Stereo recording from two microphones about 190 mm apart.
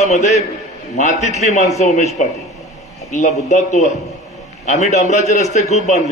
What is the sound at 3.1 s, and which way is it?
A man's voice, 40° left (ahead or behind).